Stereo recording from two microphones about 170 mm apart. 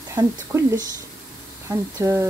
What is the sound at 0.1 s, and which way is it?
Speech, 15° right (ahead or behind).